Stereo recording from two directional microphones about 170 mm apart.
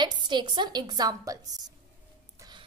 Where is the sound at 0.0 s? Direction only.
25° right (ahead or behind).